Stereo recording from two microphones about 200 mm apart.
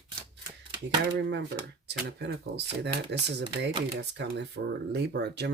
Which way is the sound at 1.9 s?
60° right (ahead or behind).